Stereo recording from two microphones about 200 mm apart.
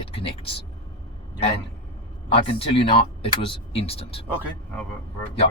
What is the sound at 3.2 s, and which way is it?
Speech, 25° left (ahead or behind).